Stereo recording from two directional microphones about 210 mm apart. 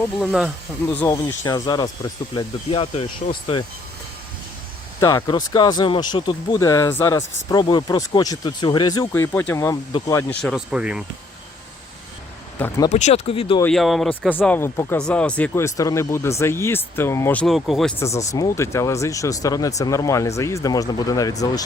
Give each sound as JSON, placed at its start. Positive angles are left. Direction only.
{"t": 0.2, "sound": "speech", "side_deg": 0}
{"t": 0.9, "sound": "speech", "side_deg": 15}
{"t": 4.9, "sound": "speech", "side_deg": 15}
{"t": 10.4, "sound": "speech", "side_deg": -5}
{"t": 12.5, "sound": "speech", "side_deg": 10}
{"t": 12.9, "sound": "speech", "side_deg": 35}
{"t": 13.6, "sound": "speech", "side_deg": 5}
{"t": 18.3, "sound": "speech", "side_deg": 15}